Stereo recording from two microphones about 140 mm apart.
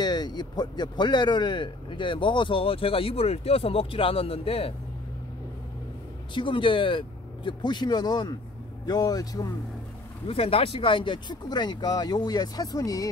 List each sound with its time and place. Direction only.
0.0 s a man's voice: 30° left (ahead or behind)
6.3 s a man's voice: 35° left (ahead or behind)
10.2 s a man's voice: 40° left (ahead or behind); by 13.1 s 25° left (ahead or behind)